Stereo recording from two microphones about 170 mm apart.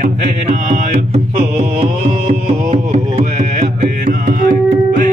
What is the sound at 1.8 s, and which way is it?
Music, 35° right (ahead or behind).